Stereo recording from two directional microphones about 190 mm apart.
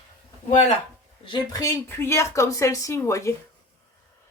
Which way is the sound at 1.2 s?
20° left (ahead or behind).